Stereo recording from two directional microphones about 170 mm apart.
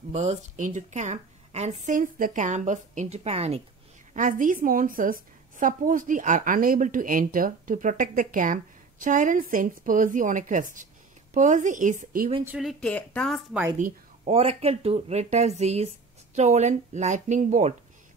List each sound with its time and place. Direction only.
0.1 s a woman's voice: 40° right (ahead or behind)
4.1 s a woman's voice: 50° right (ahead or behind)
12.4 s a woman's voice: centre (ahead or behind)
14.2 s a woman's voice: 35° right (ahead or behind)